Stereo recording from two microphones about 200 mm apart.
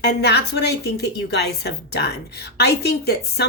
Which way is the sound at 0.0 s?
55° left (ahead or behind).